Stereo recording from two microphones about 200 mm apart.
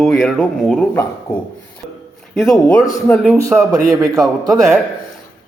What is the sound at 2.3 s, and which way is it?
A man's voice, centre (ahead or behind).